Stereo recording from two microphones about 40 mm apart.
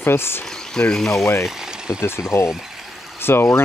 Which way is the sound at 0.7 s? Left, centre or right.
Centre.